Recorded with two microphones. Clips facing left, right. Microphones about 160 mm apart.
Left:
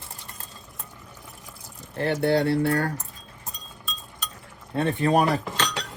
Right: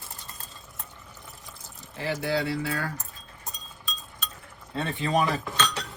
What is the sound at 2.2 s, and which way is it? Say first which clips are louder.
Speech: left 7 dB; 55° left (ahead or behind).